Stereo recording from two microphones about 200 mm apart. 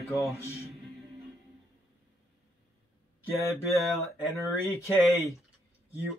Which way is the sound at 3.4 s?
15° left (ahead or behind).